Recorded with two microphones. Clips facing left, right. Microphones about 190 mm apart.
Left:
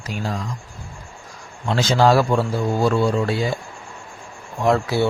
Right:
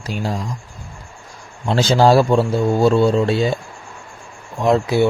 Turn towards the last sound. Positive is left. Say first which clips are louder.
# right 3 dB
turn(degrees=-20)  # may be behind; listen again after turning